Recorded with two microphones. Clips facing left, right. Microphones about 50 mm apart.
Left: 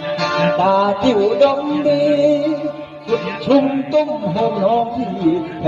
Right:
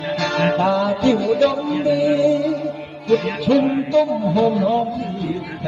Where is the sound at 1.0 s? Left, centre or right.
Left.